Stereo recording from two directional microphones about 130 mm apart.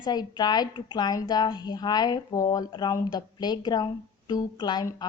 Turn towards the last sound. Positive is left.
turn(degrees=35)  # may be behind; listen again after turning